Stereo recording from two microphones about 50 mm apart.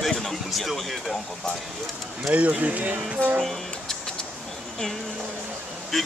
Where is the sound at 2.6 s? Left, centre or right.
Right.